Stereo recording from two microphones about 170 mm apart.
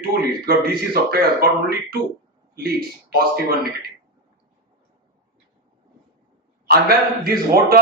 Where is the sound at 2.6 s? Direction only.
60° right (ahead or behind).